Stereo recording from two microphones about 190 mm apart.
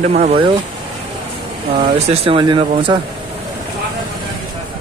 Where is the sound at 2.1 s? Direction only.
25° right (ahead or behind).